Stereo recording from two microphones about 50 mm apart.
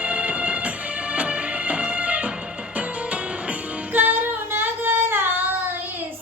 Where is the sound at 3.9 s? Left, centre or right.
Right.